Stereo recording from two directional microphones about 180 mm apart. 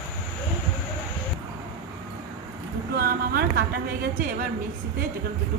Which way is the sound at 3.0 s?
60° right (ahead or behind).